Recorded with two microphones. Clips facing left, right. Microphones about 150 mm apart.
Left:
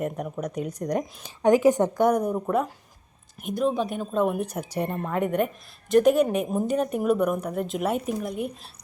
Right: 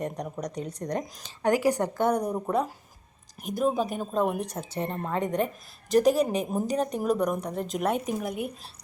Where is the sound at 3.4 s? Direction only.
Centre (ahead or behind).